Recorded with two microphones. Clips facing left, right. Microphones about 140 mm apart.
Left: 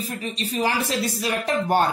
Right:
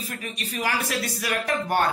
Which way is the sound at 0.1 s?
25° left (ahead or behind).